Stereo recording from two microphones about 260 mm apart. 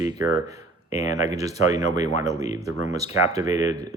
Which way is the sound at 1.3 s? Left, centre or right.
Centre.